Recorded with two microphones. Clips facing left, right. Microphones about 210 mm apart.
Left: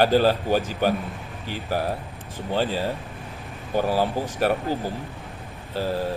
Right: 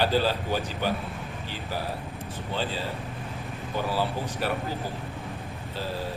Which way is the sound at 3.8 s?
45° left (ahead or behind).